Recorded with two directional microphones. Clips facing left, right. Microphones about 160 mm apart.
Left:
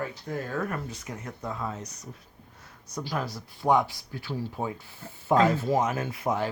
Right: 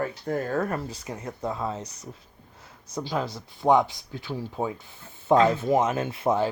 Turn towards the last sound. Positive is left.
turn(degrees=-30)  # may be behind; listen again after turning